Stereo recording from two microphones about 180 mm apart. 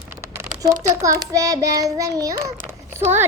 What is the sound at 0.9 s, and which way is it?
Child singing, 15° right (ahead or behind).